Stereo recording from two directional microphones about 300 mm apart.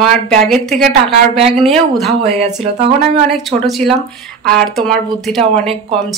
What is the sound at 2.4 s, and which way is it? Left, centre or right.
Speech, right.